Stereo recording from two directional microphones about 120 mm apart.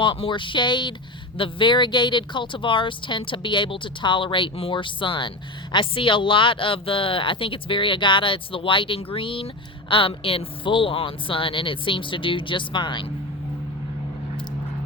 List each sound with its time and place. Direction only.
0.0 s speech: 45° left (ahead or behind)